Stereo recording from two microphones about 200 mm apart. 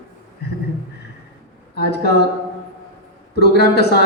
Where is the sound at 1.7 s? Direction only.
55° left (ahead or behind).